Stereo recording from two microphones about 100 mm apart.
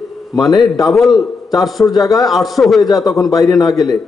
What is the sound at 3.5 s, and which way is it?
Speech, 40° left (ahead or behind).